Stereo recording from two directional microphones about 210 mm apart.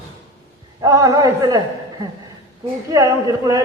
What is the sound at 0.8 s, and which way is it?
Speech, 15° right (ahead or behind).